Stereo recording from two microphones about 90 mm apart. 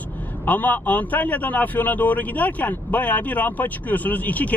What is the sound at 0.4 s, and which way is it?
A man's voice, 20° left (ahead or behind).